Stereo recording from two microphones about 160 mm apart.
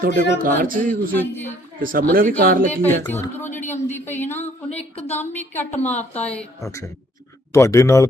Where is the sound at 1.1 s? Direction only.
10° left (ahead or behind).